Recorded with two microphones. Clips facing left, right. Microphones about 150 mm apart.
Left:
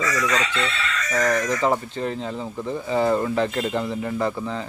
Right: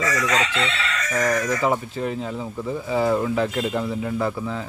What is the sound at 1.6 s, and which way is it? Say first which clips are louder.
Speech: even; 5° right (ahead or behind).